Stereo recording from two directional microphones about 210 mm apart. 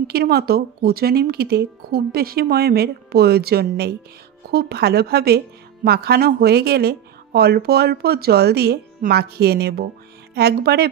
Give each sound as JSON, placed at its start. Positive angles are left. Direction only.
{"t": 0.0, "sound": "speech", "side_deg": -50}